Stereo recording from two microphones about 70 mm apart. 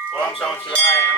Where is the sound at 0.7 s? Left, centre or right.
Left.